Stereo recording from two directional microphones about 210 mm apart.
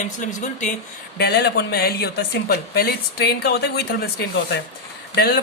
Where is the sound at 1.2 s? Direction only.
50° left (ahead or behind).